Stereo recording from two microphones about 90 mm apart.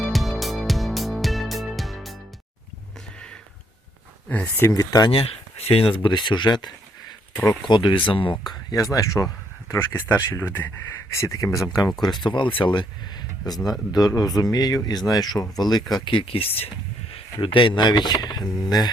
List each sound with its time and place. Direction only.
0.0 s music: centre (ahead or behind)
4.3 s speech: 20° left (ahead or behind)
4.7 s speech: 40° left (ahead or behind)
5.1 s speech: 90° left; by 6.7 s 55° left (ahead or behind)
7.7 s speech: 65° left (ahead or behind)
8.7 s speech: 40° left (ahead or behind)
11.9 s speech: 55° left (ahead or behind); by 16.6 s 90° left
17.2 s speech: 80° left; by 18.9 s 50° left (ahead or behind)